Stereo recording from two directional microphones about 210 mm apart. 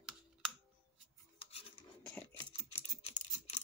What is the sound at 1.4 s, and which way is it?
Filing, 30° left (ahead or behind).